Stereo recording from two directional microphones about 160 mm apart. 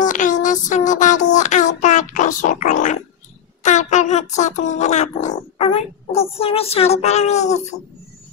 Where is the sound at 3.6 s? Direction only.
50° left (ahead or behind).